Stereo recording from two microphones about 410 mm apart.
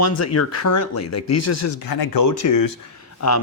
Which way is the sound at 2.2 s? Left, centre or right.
Left.